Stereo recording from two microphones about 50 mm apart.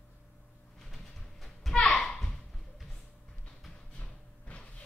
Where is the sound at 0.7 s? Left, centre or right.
Centre.